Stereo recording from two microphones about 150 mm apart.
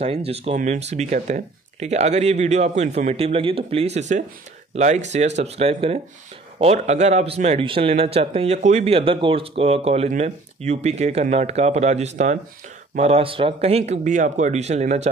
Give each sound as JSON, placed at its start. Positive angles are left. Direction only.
{"t": 0.0, "sound": "a man's voice", "side_deg": -40}